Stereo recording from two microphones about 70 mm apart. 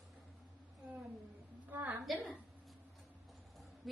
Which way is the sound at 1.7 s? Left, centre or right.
Right.